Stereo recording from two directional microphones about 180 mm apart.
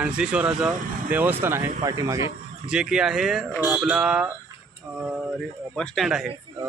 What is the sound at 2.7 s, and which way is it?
Speech, 5° right (ahead or behind).